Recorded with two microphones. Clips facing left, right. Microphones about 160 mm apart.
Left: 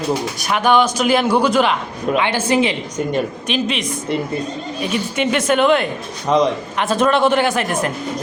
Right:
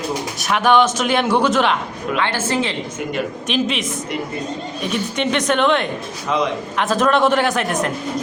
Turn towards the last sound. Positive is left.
turn(degrees=0)  # may be behind; listen again after turning